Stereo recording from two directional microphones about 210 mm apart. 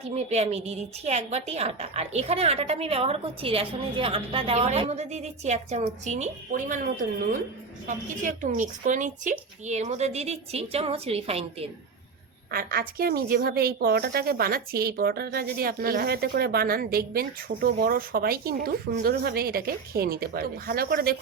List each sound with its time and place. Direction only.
0.0 s a woman's voice: 30° right (ahead or behind)
12.5 s a woman's voice: 45° right (ahead or behind)